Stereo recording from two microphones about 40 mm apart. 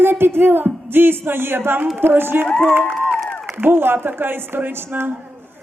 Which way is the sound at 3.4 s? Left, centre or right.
Right.